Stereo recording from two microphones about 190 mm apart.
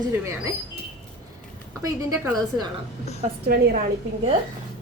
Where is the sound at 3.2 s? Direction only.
45° right (ahead or behind).